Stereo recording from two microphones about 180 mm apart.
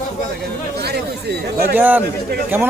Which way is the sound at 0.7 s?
65° right (ahead or behind).